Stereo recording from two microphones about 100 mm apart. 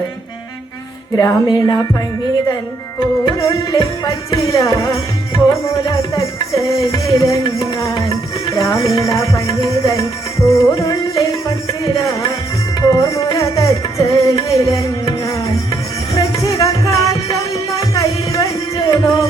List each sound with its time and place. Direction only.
1.1 s music: 35° left (ahead or behind)
3.3 s music: 35° left (ahead or behind)